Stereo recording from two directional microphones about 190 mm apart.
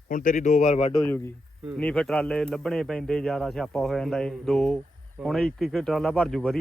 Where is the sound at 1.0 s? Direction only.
10° left (ahead or behind).